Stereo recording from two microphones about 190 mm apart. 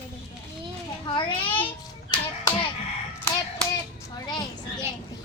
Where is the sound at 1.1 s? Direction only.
25° left (ahead or behind).